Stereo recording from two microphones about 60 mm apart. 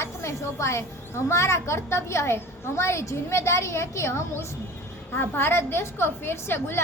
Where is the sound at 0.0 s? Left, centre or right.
Left.